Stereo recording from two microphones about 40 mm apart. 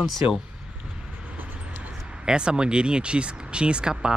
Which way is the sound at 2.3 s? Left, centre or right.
Right.